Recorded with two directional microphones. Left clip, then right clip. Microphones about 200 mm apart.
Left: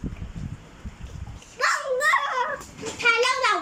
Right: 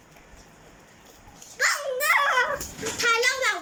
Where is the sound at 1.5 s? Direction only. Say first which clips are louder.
Left 1 dB; 15° left (ahead or behind).